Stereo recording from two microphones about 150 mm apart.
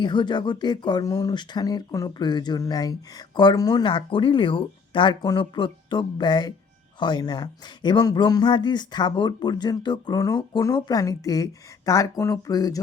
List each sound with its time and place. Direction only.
0.0 s speech: 30° left (ahead or behind)